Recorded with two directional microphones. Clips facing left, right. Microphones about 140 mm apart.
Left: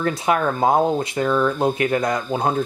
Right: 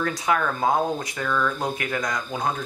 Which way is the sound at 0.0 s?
25° left (ahead or behind).